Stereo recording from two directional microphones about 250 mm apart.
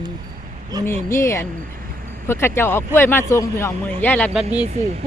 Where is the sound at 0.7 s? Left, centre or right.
Centre.